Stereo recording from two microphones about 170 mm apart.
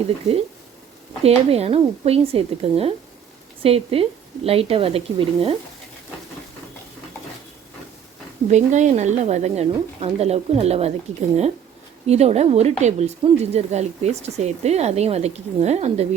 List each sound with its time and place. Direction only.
1.2 s speech: 35° right (ahead or behind)
8.4 s speech: 45° right (ahead or behind)
12.0 s speech: 40° right (ahead or behind)